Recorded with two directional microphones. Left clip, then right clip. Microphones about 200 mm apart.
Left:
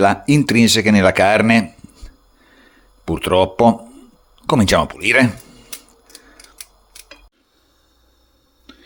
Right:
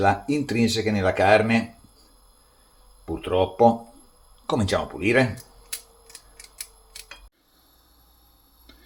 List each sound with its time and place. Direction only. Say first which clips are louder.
0.0 s speech: left 7 dB; 50° left (ahead or behind)
3.1 s speech: left 8 dB; 50° left (ahead or behind)
8.7 s tick-tock: left 9 dB; 35° left (ahead or behind)